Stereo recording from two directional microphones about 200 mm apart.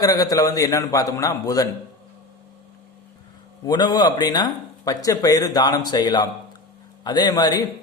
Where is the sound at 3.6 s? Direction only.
20° left (ahead or behind).